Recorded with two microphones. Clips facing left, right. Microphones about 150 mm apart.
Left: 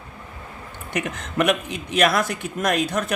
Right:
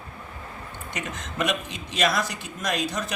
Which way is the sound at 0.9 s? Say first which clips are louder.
Left 8 dB; 60° left (ahead or behind).